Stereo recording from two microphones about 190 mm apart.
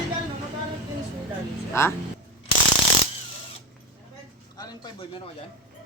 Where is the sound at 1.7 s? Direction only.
15° left (ahead or behind).